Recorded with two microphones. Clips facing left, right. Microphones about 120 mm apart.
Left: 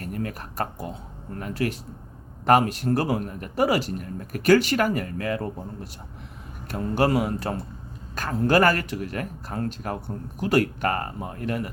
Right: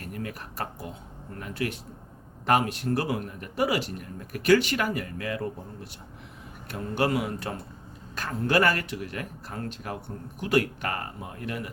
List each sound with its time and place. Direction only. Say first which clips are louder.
0.0 s speech: left 5 dB; 40° left (ahead or behind)
6.7 s speech: left 4 dB; 40° left (ahead or behind)